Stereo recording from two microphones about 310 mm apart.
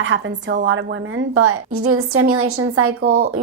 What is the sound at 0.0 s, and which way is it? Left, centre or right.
A woman's voice, right.